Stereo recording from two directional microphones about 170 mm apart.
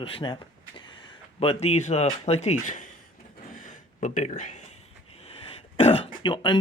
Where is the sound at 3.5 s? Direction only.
50° left (ahead or behind).